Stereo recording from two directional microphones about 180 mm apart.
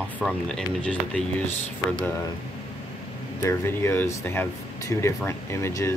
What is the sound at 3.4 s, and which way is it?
Speech, 15° left (ahead or behind).